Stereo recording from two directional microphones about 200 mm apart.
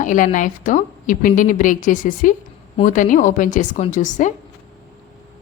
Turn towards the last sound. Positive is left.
turn(degrees=40)  # may be behind; listen again after turning